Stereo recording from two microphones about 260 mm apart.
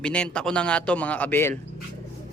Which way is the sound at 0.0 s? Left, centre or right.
Centre.